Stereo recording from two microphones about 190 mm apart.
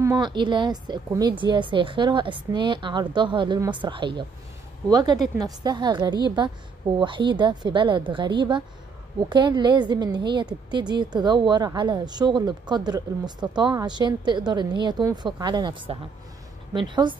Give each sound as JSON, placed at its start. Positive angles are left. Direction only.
{"t": 0.0, "sound": "a woman's voice", "side_deg": -20}